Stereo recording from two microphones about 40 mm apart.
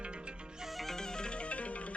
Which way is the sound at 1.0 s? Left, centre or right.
Centre.